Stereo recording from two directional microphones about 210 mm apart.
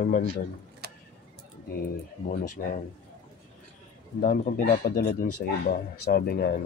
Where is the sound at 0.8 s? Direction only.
50° right (ahead or behind).